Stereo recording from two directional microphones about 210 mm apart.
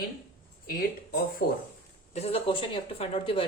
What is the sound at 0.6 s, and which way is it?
Speech, 45° left (ahead or behind).